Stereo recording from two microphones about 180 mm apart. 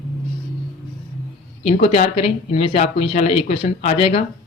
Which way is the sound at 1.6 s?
35° left (ahead or behind).